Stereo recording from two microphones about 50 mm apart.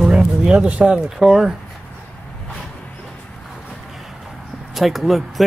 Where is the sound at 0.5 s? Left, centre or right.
Right.